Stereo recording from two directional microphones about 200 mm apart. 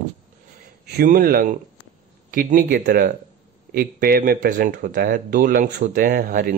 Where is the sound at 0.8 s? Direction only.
50° right (ahead or behind).